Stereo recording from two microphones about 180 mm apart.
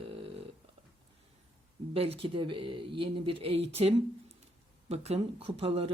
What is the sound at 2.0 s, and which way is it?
Speech, 30° right (ahead or behind).